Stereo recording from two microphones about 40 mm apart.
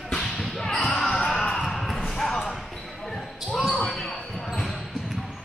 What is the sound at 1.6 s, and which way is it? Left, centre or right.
Basketball bounce, centre.